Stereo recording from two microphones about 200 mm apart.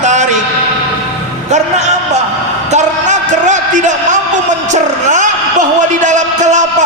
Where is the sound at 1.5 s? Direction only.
35° right (ahead or behind).